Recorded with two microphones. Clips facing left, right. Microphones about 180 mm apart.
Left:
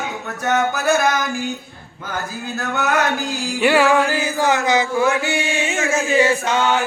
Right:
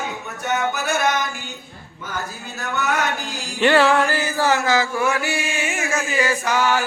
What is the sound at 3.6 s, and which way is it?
Music, 10° left (ahead or behind).